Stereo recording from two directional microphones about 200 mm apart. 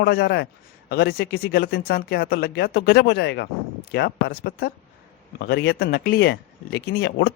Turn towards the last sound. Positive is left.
turn(degrees=55)  # may be behind; listen again after turning